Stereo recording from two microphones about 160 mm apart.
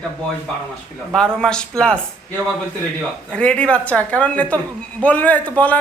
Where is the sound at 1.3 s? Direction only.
5° left (ahead or behind).